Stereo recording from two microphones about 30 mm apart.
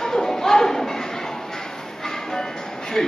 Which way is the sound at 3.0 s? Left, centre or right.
Left.